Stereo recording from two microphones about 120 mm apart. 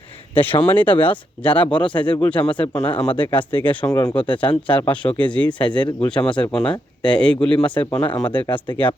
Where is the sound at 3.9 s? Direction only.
30° left (ahead or behind).